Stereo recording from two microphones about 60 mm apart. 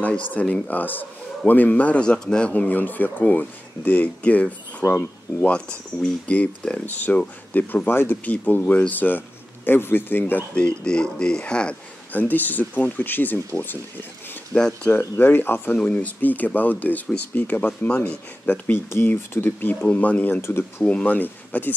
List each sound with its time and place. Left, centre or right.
0.0 s speech: left
2.0 s speech: centre; by 10.4 s left
10.8 s speech: centre; by 13.7 s left
14.5 s speech: left
14.9 s speech: left
15.8 s speech: left
19.1 s speech: left
19.8 s speech: left
20.4 s speech: left
20.8 s speech: left